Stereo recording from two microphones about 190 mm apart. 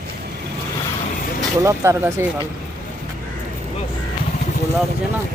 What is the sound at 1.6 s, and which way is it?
Speech, 15° right (ahead or behind).